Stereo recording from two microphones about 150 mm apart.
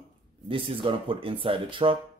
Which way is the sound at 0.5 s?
35° right (ahead or behind).